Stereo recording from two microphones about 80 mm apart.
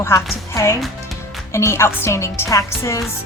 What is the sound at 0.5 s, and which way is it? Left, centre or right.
Speech, left.